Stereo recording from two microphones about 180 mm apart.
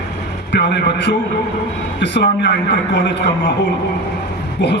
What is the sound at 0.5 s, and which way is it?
A man's voice, 70° left (ahead or behind).